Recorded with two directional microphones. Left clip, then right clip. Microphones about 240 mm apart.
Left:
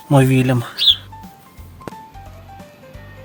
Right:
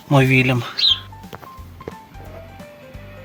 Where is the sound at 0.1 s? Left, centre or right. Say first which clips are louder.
Even; left.